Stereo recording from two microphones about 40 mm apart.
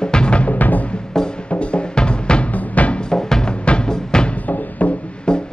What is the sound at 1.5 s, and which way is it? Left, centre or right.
Music, left.